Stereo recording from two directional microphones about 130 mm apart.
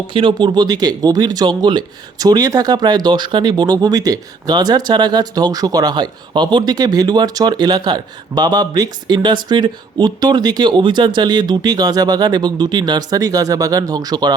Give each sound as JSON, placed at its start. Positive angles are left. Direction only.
{"t": 0.1, "sound": "speech", "side_deg": -40}